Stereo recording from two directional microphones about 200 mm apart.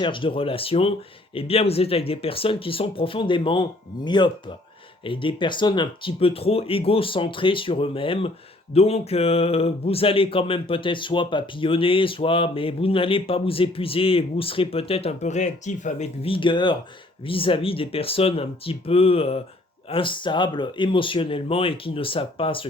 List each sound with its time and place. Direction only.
0.0 s speech: 25° left (ahead or behind)